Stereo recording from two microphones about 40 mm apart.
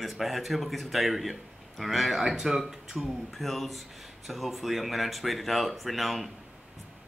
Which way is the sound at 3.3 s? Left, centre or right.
Centre.